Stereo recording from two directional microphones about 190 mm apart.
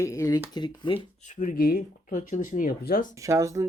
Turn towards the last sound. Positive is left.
turn(degrees=-15)  # may be behind; listen again after turning